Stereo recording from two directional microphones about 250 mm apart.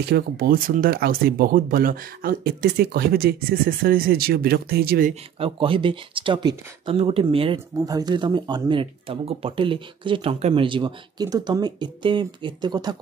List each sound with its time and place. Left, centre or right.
0.1 s speech: right
5.4 s speech: right